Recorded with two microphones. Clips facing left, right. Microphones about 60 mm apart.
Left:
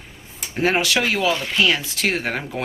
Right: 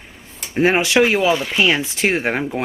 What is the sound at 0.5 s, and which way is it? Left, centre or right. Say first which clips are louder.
Speech: right 5 dB; right.